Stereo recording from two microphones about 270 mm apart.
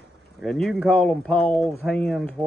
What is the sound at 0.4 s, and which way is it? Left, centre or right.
Speech, centre.